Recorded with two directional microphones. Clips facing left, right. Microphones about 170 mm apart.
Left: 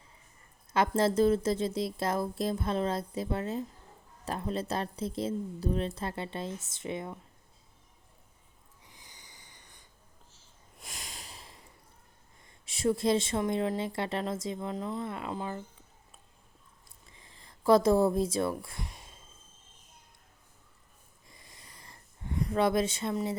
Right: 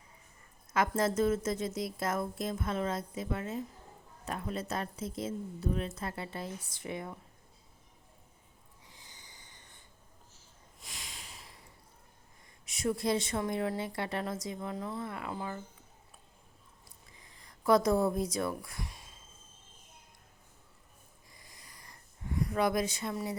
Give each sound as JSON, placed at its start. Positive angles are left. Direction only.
{"t": 0.7, "sound": "a woman's voice", "side_deg": 30}
{"t": 8.8, "sound": "snort", "side_deg": 20}
{"t": 10.8, "sound": "a sound", "side_deg": 45}
{"t": 12.6, "sound": "a woman's voice", "side_deg": 30}
{"t": 17.2, "sound": "speech", "side_deg": 25}
{"t": 21.2, "sound": "wheeze", "side_deg": 25}